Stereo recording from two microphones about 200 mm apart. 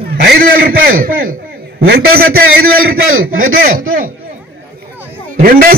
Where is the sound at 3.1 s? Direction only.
90° right.